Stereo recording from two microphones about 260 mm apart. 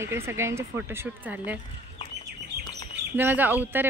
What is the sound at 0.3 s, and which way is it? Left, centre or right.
Speech, centre.